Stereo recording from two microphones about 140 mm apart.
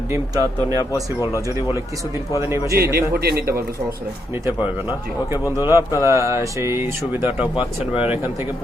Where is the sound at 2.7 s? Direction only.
90° right.